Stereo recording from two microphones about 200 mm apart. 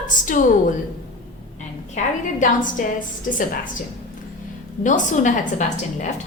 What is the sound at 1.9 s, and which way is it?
A woman's voice, 40° left (ahead or behind).